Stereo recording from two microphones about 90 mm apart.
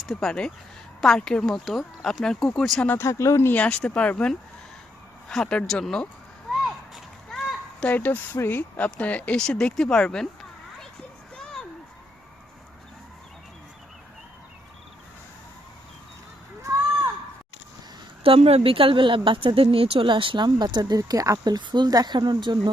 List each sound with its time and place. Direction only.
0.1 s speech: 5° left (ahead or behind)
3.0 s speech: 30° left (ahead or behind)
3.6 s speech: 10° left (ahead or behind)
6.5 s a sound: centre (ahead or behind)
7.9 s speech: 20° left (ahead or behind)
18.2 s speech: 90° right; by 21.3 s 40° right (ahead or behind)
21.3 s speech: 55° right (ahead or behind)